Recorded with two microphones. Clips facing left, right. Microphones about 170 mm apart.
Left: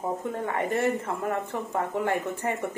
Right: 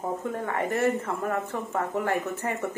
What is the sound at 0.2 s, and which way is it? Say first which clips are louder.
Speech: even; 20° left (ahead or behind).